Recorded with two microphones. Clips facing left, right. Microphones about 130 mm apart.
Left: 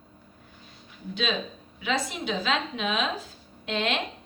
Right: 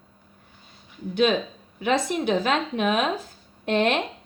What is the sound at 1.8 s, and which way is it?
A woman's voice, 50° right (ahead or behind).